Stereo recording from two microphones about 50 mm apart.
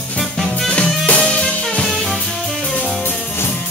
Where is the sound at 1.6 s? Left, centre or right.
Centre.